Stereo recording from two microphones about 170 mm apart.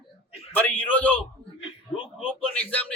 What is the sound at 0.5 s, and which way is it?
Speech, 10° left (ahead or behind).